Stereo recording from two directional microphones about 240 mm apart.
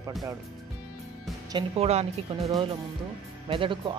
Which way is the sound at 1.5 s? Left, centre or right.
Right.